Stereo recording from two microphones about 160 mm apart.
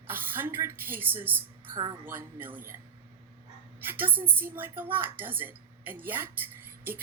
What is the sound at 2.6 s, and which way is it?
A woman's voice, 15° right (ahead or behind).